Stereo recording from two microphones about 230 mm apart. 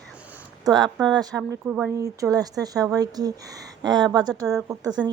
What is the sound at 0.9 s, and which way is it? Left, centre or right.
Speech, centre.